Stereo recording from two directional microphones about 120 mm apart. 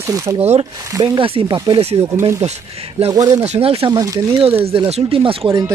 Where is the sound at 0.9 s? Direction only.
30° right (ahead or behind).